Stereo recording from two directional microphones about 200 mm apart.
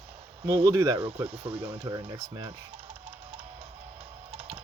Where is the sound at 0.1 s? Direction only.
30° right (ahead or behind).